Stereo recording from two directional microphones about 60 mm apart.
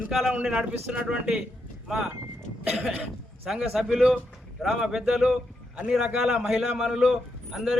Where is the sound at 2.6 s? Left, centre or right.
Centre.